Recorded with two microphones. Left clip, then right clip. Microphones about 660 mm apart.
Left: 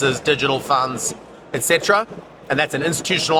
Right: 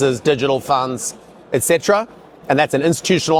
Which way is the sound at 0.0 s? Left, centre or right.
Right.